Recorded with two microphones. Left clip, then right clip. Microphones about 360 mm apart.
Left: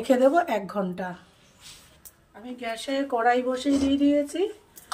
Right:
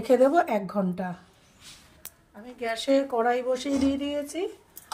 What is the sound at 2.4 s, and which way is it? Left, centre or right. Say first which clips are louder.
Speech: right 2 dB; right.